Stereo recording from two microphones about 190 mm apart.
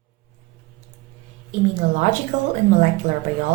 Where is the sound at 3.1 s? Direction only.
40° right (ahead or behind).